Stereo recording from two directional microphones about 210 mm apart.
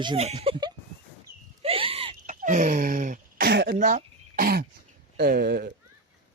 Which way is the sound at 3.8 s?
40° right (ahead or behind).